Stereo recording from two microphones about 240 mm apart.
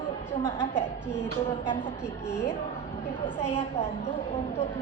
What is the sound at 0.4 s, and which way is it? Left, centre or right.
Speech, centre.